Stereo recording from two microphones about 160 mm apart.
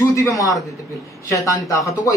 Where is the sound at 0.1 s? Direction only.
20° left (ahead or behind).